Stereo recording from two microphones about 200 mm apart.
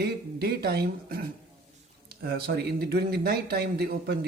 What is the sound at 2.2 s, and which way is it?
Speech, 50° right (ahead or behind).